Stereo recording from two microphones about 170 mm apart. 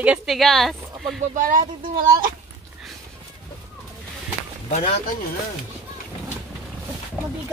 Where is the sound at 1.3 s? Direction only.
50° right (ahead or behind).